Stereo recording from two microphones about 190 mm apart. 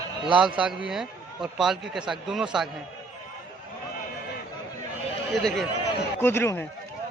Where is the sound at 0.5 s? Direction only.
5° right (ahead or behind).